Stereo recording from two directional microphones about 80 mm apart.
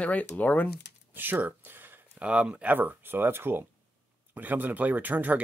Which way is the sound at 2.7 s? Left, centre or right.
Right.